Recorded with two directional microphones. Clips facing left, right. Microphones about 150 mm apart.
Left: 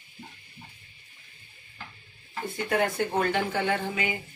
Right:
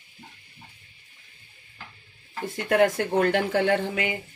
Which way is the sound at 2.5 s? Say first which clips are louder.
Right 6 dB; 75° right (ahead or behind).